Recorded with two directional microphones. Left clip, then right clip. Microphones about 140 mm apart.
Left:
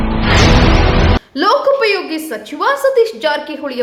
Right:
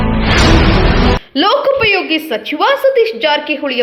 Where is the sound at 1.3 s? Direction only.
25° right (ahead or behind).